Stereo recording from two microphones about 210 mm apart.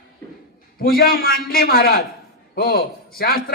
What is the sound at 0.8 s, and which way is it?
A man's voice, 45° left (ahead or behind).